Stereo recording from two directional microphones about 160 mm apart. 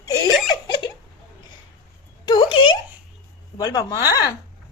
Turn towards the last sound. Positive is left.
turn(degrees=25)  # may be behind; listen again after turning